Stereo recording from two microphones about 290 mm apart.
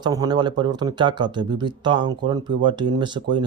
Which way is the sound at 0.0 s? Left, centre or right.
Centre.